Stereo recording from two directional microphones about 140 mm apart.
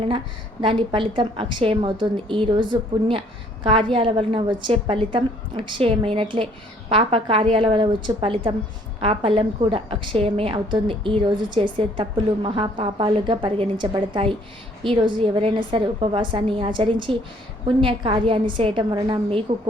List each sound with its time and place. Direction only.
0.6 s a woman's voice: 35° right (ahead or behind)